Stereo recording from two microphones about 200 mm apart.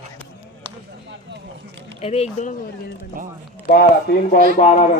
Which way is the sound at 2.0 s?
30° left (ahead or behind).